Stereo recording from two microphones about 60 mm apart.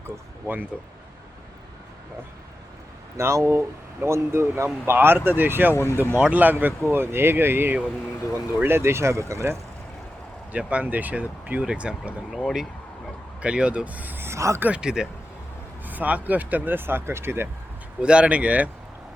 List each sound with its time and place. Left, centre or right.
0.4 s speech: right
3.2 s speech: right
5.7 s speech: left
6.0 s speech: right
6.8 s speech: right
10.5 s speech: right
11.6 s speech: centre
13.4 s speech: centre
14.3 s a sound: right
14.7 s speech: centre
15.9 s speech: right
18.0 s speech: centre